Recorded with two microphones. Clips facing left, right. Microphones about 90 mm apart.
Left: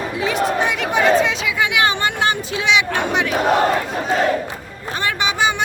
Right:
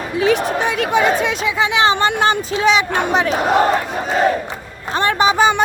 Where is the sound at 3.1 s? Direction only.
35° right (ahead or behind).